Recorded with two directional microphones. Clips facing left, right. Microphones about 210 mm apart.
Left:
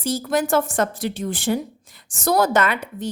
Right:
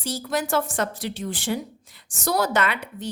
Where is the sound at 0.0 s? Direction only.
50° left (ahead or behind).